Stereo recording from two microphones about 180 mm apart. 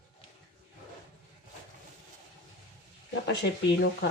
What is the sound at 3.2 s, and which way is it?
Speech, 70° left (ahead or behind).